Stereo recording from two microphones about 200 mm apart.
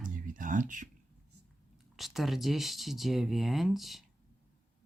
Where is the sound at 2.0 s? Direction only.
Centre (ahead or behind).